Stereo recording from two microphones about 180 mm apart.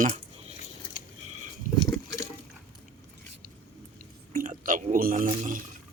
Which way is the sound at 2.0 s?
15° left (ahead or behind).